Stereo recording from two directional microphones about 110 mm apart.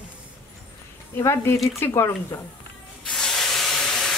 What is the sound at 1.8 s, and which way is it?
Speech, 25° left (ahead or behind).